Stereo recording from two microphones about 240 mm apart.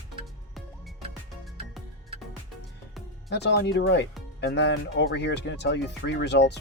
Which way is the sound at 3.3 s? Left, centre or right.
Left.